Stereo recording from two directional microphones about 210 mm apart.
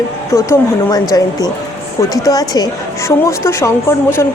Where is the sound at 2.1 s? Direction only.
15° left (ahead or behind).